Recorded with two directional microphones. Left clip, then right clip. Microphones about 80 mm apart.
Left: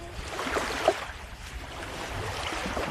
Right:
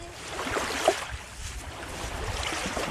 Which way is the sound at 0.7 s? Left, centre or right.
Right.